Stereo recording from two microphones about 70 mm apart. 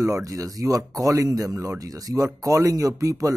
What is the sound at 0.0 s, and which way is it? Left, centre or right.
Speech, right.